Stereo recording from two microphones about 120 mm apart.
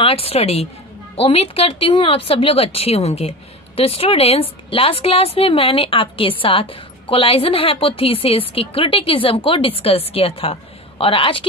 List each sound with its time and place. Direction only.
0.0 s a woman's voice: 55° left (ahead or behind)